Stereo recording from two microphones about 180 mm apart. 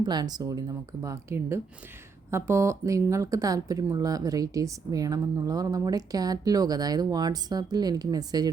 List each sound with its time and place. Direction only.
0.0 s speech: 25° right (ahead or behind)